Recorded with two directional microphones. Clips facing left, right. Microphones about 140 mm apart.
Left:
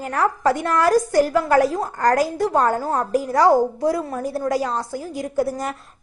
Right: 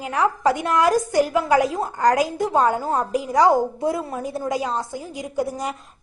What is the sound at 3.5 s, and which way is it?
A woman's voice, 25° right (ahead or behind).